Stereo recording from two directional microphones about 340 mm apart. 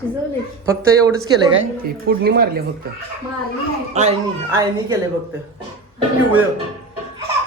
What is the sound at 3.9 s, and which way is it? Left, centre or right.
A woman's voice, centre.